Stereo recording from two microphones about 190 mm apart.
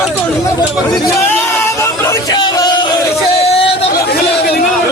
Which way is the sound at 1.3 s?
15° left (ahead or behind).